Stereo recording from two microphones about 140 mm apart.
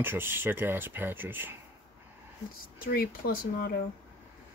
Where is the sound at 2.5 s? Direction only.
90° left.